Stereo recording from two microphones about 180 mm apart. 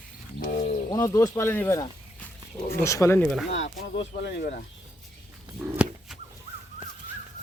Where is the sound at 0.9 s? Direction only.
20° left (ahead or behind).